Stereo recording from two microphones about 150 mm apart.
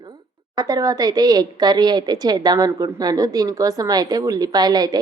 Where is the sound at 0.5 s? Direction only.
25° right (ahead or behind).